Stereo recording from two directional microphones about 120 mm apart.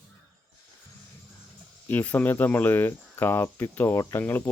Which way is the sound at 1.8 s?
15° left (ahead or behind).